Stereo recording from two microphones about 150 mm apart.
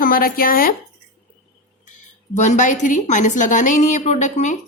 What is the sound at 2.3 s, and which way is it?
A woman's voice, 50° left (ahead or behind).